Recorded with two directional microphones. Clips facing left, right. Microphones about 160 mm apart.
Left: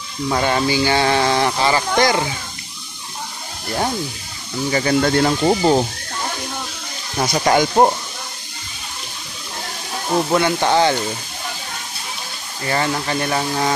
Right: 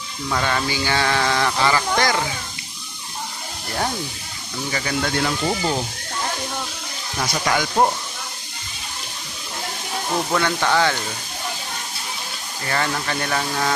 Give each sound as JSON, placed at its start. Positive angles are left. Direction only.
{"t": 0.3, "sound": "speech", "side_deg": 30}
{"t": 4.7, "sound": "speech", "side_deg": 40}
{"t": 7.2, "sound": "speech", "side_deg": 30}
{"t": 10.3, "sound": "speech", "side_deg": 25}
{"t": 12.7, "sound": "speech", "side_deg": 20}